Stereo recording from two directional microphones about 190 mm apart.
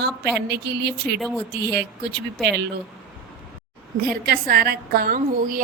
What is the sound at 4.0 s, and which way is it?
A woman's voice, 55° right (ahead or behind).